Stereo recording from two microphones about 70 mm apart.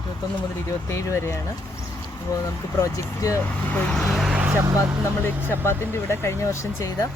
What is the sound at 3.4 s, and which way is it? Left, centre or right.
Speech, centre.